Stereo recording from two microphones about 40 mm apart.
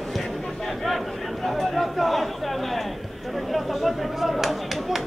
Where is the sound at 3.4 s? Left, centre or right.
Centre.